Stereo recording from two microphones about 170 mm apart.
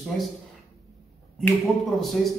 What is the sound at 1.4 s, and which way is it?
Speech, centre (ahead or behind).